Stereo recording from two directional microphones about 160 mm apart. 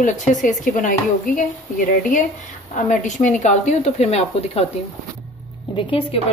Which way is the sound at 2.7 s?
50° left (ahead or behind).